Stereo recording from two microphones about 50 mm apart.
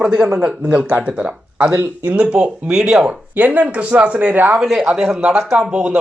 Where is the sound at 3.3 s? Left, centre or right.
Right.